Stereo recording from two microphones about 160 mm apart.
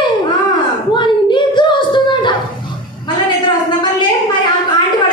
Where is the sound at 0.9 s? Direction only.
30° left (ahead or behind).